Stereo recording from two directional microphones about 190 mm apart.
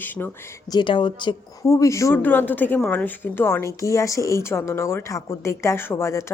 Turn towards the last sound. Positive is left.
turn(degrees=15)  # may be behind; listen again after turning